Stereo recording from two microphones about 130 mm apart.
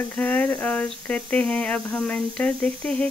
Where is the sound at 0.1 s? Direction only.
15° left (ahead or behind).